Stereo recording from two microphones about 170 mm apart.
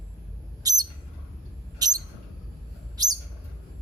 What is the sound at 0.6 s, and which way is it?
Bird, 20° right (ahead or behind).